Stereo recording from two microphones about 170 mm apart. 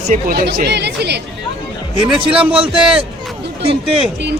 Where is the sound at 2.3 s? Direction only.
5° right (ahead or behind).